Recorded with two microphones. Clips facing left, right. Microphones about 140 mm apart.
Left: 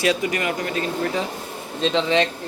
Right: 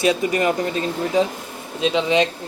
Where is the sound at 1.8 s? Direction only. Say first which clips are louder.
Right 1 dB; 10° right (ahead or behind).